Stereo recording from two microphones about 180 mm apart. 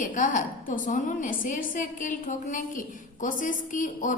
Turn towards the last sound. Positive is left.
turn(degrees=45)  # may be behind; listen again after turning